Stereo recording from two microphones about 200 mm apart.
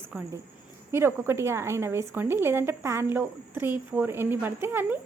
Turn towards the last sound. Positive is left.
turn(degrees=-10)  # may be behind; listen again after turning